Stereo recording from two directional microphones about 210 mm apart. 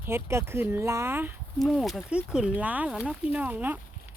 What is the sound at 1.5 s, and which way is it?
Speech, centre (ahead or behind).